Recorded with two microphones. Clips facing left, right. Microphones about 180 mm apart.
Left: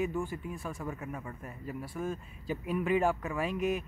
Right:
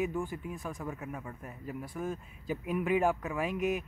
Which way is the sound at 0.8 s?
5° right (ahead or behind).